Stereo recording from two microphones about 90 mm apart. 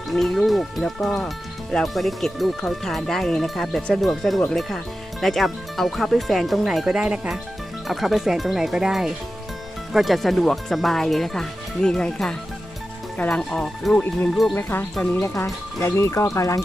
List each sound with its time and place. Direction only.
0.1 s speech: centre (ahead or behind)
14.5 s speech: 25° left (ahead or behind)